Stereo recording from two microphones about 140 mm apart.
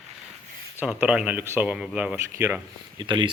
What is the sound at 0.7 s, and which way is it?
Speech, 10° right (ahead or behind).